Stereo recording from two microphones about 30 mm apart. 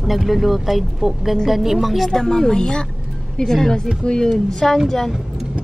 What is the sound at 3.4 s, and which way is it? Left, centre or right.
Speech, centre.